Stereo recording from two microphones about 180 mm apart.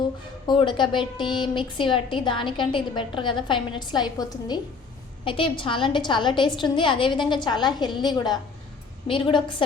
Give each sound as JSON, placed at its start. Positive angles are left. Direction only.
{"t": 0.4, "sound": "a woman's voice", "side_deg": 25}